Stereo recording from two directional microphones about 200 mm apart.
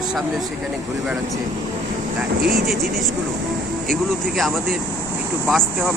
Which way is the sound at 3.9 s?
Centre (ahead or behind).